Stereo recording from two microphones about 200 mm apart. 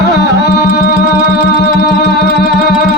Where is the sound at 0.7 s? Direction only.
35° left (ahead or behind).